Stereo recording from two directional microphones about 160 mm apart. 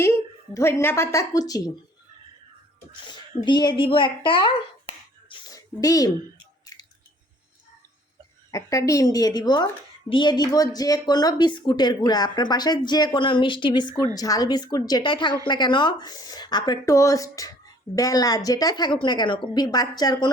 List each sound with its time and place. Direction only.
0.0 s a woman's voice: 15° left (ahead or behind)
2.9 s speech: 30° left (ahead or behind)
6.7 s squish: 25° left (ahead or behind)
8.4 s speech: 20° left (ahead or behind)